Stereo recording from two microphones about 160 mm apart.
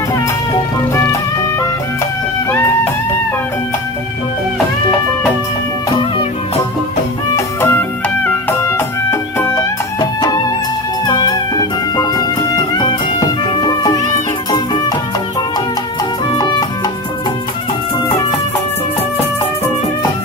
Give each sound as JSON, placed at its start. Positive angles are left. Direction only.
{"t": 7.3, "sound": "music", "side_deg": 15}
{"t": 16.3, "sound": "music", "side_deg": 25}